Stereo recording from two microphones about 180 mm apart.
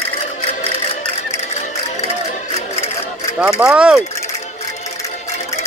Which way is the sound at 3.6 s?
5° right (ahead or behind).